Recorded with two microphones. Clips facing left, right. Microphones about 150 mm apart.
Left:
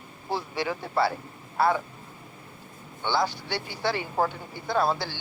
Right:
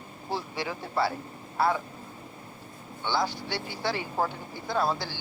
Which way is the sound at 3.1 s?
60° left (ahead or behind).